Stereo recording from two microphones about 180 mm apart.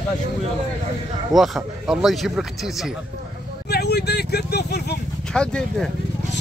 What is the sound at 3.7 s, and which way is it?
Speech, 65° left (ahead or behind).